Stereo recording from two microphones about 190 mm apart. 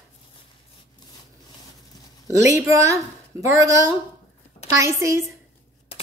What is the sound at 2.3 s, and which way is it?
Speech, 15° right (ahead or behind).